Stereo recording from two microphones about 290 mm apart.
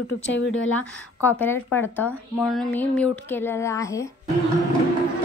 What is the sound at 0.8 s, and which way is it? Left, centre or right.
Speech, centre.